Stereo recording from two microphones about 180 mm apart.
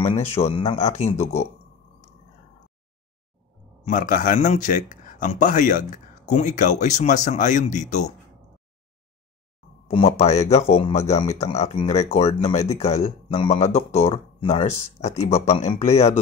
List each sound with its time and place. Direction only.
0.0 s speech: 35° left (ahead or behind)
3.8 s speech: 45° left (ahead or behind)
9.8 s speech: 35° left (ahead or behind)